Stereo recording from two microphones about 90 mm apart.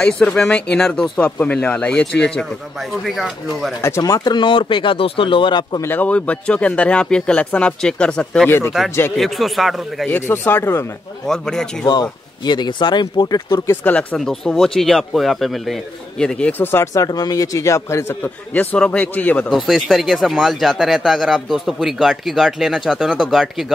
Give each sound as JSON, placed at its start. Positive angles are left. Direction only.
{"t": 0.0, "sound": "speech", "side_deg": 10}
{"t": 4.0, "sound": "speech", "side_deg": 45}
{"t": 5.8, "sound": "speech", "side_deg": 20}
{"t": 8.5, "sound": "speech", "side_deg": 25}
{"t": 9.1, "sound": "speech", "side_deg": 0}
{"t": 10.0, "sound": "speech", "side_deg": 25}
{"t": 11.2, "sound": "speech", "side_deg": 5}
{"t": 11.8, "sound": "speech", "side_deg": 50}
{"t": 14.1, "sound": "speech", "side_deg": 5}
{"t": 16.6, "sound": "speech", "side_deg": 25}
{"t": 16.9, "sound": "a man's voice", "side_deg": 40}
{"t": 18.5, "sound": "speech", "side_deg": 20}
{"t": 19.5, "sound": "speech", "side_deg": 0}